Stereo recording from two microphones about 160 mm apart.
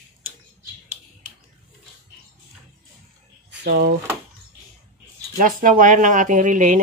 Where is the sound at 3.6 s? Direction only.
85° right.